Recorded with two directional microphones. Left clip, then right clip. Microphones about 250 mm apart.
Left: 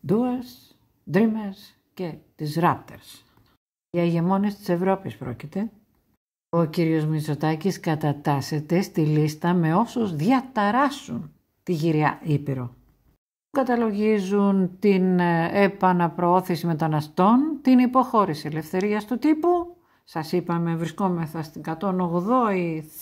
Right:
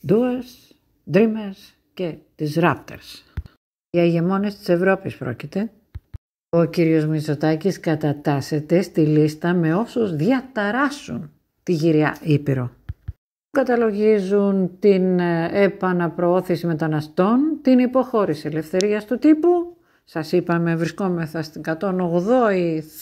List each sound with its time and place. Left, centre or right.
0.0 s speech: centre
3.9 s speech: centre
6.5 s speech: centre
12.4 s speech: centre
13.6 s speech: centre
20.5 s speech: centre